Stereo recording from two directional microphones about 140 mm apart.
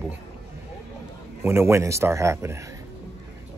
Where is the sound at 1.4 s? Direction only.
15° right (ahead or behind).